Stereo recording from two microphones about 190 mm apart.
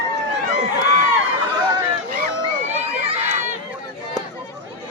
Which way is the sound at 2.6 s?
35° right (ahead or behind).